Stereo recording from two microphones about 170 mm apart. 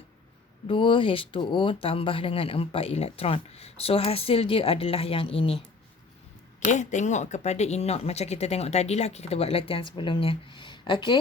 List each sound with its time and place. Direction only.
0.7 s speech: 30° left (ahead or behind)
6.7 s speech: 45° left (ahead or behind); by 11.2 s 25° left (ahead or behind)